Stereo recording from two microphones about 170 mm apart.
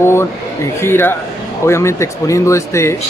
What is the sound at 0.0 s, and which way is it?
Speech, 15° left (ahead or behind).